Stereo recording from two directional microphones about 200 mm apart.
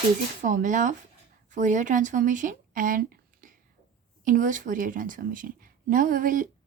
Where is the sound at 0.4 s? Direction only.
40° right (ahead or behind).